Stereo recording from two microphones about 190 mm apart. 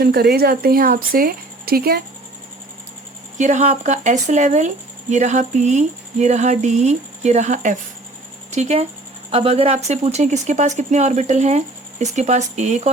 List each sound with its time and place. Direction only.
0.0 s speech: 55° right (ahead or behind)
3.3 s speech: 40° right (ahead or behind)